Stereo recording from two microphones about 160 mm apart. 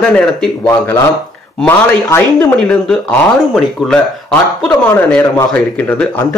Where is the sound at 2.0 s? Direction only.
15° left (ahead or behind).